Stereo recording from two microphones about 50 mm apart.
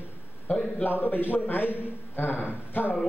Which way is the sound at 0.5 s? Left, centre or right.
Left.